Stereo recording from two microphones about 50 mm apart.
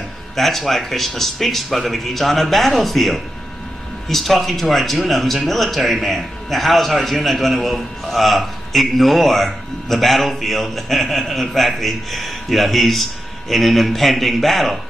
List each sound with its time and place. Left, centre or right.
0.4 s speech: centre